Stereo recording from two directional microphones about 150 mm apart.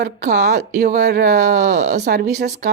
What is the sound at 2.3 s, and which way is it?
Speech, 50° right (ahead or behind).